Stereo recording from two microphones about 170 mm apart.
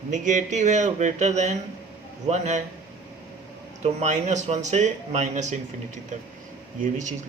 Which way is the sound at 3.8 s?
45° right (ahead or behind).